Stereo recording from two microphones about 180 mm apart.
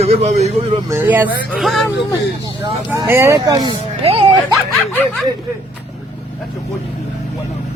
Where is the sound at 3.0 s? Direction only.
15° right (ahead or behind); by 4.2 s 30° right (ahead or behind).